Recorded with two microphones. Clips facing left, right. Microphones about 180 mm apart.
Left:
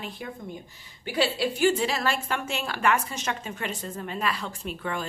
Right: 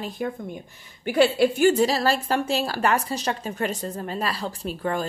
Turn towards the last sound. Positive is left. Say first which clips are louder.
# right 5 dB
turn(degrees=-40)  # may be behind; listen again after turning